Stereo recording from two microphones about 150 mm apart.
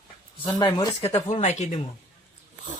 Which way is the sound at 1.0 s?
45° left (ahead or behind).